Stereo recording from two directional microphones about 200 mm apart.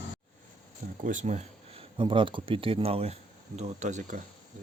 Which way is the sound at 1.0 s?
40° right (ahead or behind).